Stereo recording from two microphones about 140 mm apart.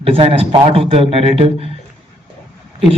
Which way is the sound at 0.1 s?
45° right (ahead or behind).